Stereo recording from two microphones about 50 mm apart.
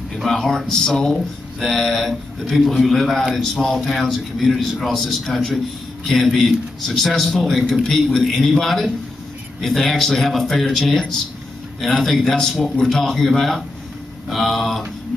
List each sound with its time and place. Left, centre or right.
0.1 s speech: centre